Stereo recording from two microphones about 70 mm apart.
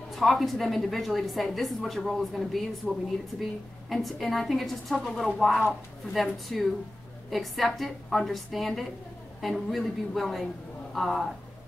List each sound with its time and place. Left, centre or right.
0.1 s a woman's voice: centre